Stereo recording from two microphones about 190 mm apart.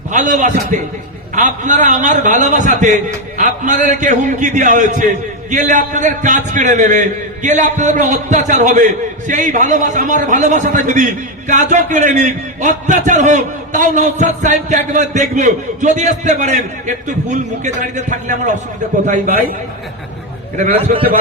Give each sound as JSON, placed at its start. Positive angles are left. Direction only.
{"t": 0.1, "sound": "a man's voice", "side_deg": -40}
{"t": 20.7, "sound": "a man's voice", "side_deg": -30}